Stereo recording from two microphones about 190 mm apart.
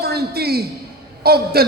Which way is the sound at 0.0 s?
55° right (ahead or behind).